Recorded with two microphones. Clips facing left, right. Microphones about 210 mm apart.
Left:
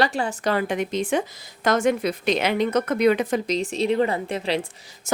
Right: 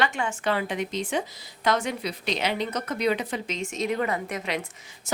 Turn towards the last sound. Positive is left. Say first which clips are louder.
# left 4 dB
turn(degrees=30)  # may be behind; listen again after turning